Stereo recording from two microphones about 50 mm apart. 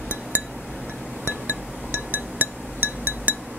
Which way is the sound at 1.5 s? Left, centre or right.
Right.